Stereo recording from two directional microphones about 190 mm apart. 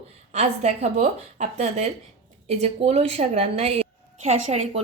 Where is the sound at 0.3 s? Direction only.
35° right (ahead or behind).